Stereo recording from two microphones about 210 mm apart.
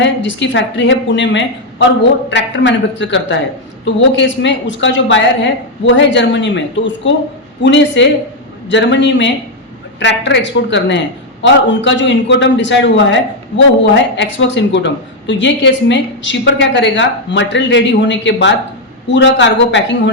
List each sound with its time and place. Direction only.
0.0 s a woman's voice: 60° left (ahead or behind)